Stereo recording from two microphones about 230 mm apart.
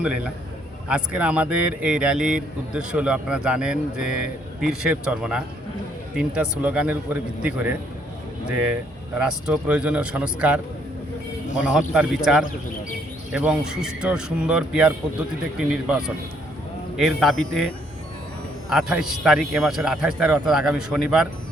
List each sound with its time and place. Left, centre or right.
0.9 s speech: centre
9.1 s speech: centre
11.6 s speech: centre
18.7 s speech: centre